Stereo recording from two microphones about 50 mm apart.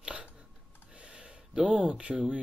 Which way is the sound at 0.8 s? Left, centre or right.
Right.